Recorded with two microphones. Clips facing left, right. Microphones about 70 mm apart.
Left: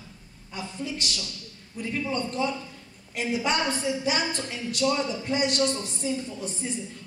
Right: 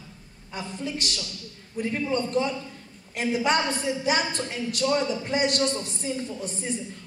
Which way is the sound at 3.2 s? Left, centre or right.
Right.